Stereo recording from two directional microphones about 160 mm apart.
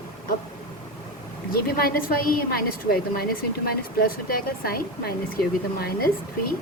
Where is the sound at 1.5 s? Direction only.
70° left (ahead or behind).